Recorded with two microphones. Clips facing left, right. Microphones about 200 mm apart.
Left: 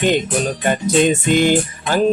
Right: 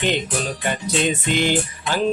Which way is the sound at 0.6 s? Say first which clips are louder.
Left 8 dB; 45° left (ahead or behind).